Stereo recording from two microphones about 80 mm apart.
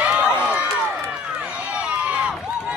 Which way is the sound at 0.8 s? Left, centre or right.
Right.